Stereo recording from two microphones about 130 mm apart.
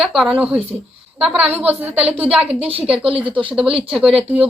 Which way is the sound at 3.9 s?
5° right (ahead or behind).